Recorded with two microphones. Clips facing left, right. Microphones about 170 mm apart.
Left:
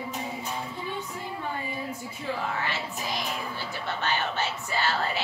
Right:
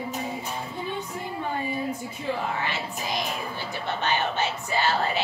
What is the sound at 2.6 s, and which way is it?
Speech, 15° right (ahead or behind).